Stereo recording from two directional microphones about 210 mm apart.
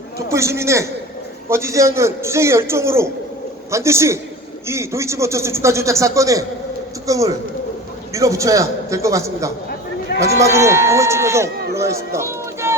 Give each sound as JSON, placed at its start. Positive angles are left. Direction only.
{"t": 0.3, "sound": "a man's voice", "side_deg": -15}
{"t": 10.1, "sound": "run", "side_deg": 45}
{"t": 10.4, "sound": "a man's voice", "side_deg": -15}
{"t": 11.7, "sound": "run", "side_deg": -15}